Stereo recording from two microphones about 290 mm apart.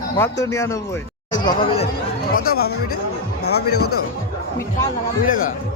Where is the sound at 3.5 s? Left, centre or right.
Left.